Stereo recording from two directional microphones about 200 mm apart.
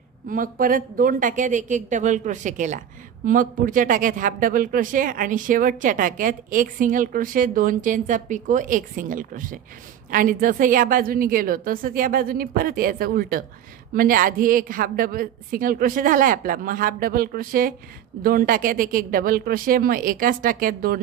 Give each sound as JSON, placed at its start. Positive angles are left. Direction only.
{"t": 0.3, "sound": "a woman's voice", "side_deg": -45}